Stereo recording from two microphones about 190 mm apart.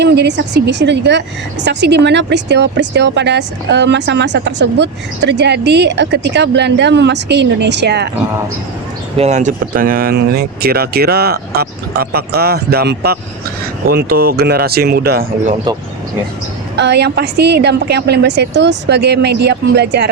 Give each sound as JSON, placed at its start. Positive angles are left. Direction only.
{"t": 0.0, "sound": "a woman's voice", "side_deg": -65}
{"t": 9.1, "sound": "a woman's voice", "side_deg": -35}
{"t": 16.7, "sound": "a woman's voice", "side_deg": -65}